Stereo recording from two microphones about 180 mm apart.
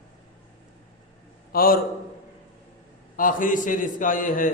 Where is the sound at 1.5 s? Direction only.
55° left (ahead or behind).